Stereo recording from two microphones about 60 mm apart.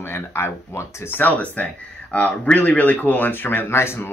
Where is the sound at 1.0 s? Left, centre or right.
Left.